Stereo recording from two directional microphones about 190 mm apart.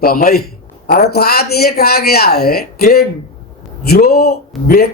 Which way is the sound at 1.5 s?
55° left (ahead or behind).